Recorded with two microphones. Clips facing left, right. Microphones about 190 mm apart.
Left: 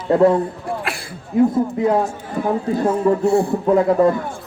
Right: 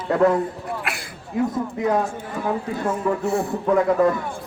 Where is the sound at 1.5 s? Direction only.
30° left (ahead or behind).